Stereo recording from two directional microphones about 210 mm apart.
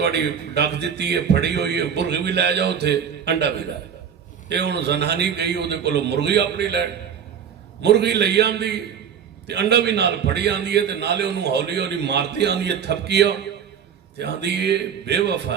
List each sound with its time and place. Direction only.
0.0 s a man's voice: 50° right (ahead or behind)